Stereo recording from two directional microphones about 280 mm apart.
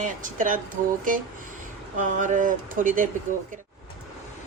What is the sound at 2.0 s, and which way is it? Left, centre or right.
Speech, right.